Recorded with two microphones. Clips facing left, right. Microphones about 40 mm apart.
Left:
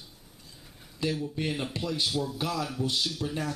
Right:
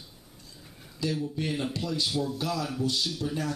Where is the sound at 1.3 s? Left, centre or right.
Centre.